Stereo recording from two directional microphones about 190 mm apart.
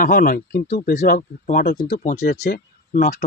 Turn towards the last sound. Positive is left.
turn(degrees=40)  # may be behind; listen again after turning